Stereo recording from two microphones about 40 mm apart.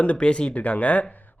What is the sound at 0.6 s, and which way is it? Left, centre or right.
Speech, left.